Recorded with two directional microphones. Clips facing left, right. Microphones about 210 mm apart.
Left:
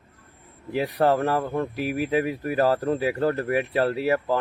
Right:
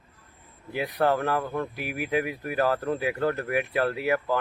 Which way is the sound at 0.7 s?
35° left (ahead or behind).